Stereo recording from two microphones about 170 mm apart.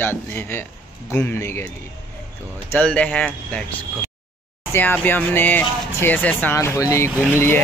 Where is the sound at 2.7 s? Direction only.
5° left (ahead or behind).